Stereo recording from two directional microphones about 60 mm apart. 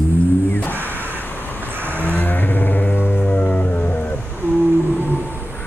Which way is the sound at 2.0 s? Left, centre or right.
Left.